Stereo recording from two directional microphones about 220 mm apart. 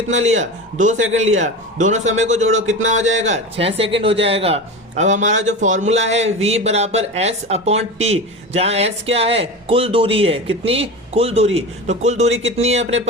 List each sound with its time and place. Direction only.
0.1 s a man's voice: 30° right (ahead or behind)